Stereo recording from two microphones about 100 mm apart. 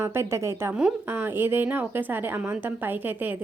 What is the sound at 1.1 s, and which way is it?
A woman's voice, 20° right (ahead or behind).